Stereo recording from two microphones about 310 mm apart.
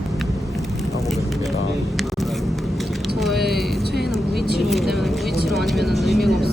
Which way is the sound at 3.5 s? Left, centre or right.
Centre.